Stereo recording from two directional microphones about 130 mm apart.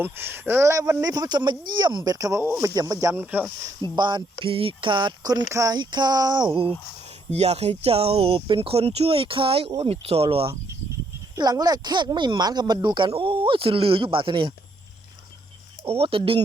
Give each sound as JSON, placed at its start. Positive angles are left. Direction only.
{"t": 0.0, "sound": "speech", "side_deg": -15}
{"t": 3.9, "sound": "speech", "side_deg": -35}
{"t": 7.3, "sound": "speech", "side_deg": -55}
{"t": 11.3, "sound": "speech", "side_deg": -30}
{"t": 15.9, "sound": "speech", "side_deg": -45}